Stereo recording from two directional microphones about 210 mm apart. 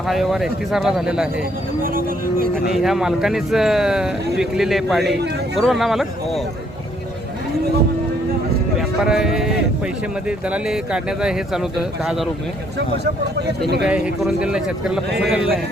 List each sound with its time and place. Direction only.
0.1 s speech: centre (ahead or behind)
1.8 s speech: 45° right (ahead or behind)
2.7 s speech: centre (ahead or behind)
9.0 s speech: centre (ahead or behind)
13.8 s speech: 5° right (ahead or behind)